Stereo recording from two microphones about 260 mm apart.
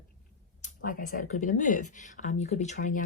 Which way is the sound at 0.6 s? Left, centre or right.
Left.